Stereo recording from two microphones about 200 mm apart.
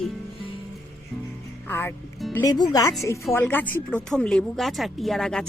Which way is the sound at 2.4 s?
20° left (ahead or behind).